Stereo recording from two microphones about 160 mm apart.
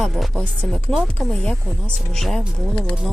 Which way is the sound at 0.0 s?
5° left (ahead or behind).